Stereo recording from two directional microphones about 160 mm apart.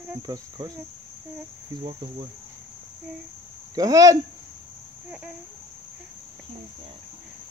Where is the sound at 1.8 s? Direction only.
35° right (ahead or behind).